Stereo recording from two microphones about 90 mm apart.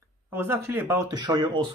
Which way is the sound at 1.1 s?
50° right (ahead or behind).